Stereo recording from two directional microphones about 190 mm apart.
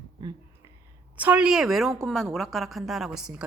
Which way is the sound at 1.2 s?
5° right (ahead or behind).